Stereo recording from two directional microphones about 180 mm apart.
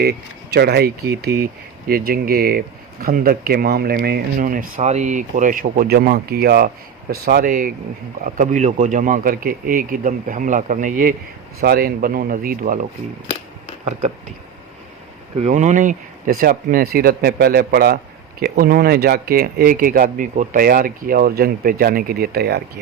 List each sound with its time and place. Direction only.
0.0 s speech: 65° right (ahead or behind); by 11.1 s 50° right (ahead or behind)
11.6 s speech: 60° right (ahead or behind)
13.8 s speech: 40° right (ahead or behind)
15.4 s speech: 40° right (ahead or behind); by 22.8 s 65° right (ahead or behind)